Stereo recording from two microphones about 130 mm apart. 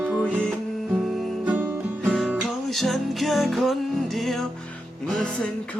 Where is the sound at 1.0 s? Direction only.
Centre (ahead or behind).